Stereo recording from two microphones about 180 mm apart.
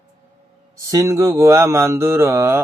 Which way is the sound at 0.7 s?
15° right (ahead or behind).